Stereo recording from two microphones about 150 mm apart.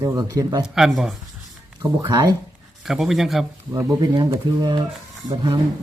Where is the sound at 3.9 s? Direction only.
25° right (ahead or behind).